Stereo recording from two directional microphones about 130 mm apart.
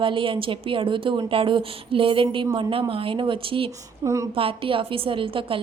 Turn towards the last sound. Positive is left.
turn(degrees=-45)  # may be behind; listen again after turning